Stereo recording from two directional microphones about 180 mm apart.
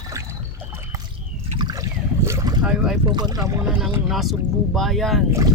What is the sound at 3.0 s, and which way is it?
Speech, 25° right (ahead or behind).